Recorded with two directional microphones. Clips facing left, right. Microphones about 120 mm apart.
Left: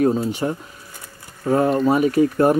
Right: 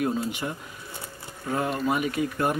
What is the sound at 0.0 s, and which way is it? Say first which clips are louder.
Speech: left 8 dB; 35° left (ahead or behind).